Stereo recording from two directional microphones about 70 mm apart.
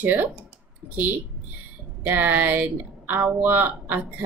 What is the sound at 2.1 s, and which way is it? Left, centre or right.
A woman's voice, right.